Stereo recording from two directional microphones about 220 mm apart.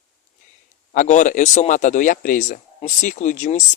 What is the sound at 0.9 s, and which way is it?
Speech, 35° left (ahead or behind).